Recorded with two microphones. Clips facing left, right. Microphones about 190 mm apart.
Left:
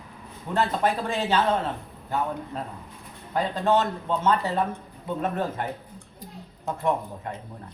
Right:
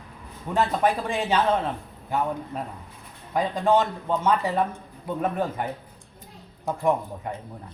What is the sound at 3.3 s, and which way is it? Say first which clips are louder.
Speech: right 1 dB; 15° right (ahead or behind).